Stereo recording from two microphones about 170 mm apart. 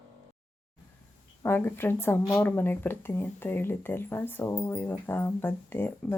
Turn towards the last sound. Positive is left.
turn(degrees=10)  # may be behind; listen again after turning